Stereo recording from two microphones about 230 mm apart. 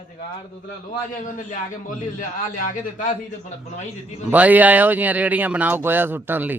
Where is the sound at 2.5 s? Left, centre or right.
Left.